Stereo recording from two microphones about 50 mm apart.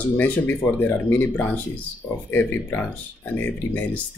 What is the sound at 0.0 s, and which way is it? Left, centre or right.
Speech, left.